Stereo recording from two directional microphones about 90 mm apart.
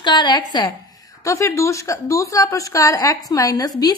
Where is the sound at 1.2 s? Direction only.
35° left (ahead or behind).